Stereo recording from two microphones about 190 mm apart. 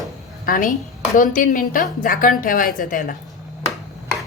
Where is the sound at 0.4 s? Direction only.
45° left (ahead or behind).